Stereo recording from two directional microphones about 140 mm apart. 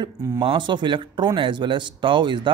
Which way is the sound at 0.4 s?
35° right (ahead or behind).